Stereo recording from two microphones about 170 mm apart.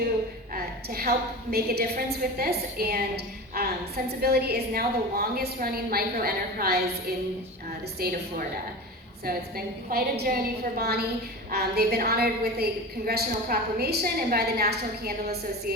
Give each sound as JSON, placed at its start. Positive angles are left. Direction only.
{"t": 0.5, "sound": "a woman's voice", "side_deg": -65}
{"t": 7.9, "sound": "a woman's voice", "side_deg": -65}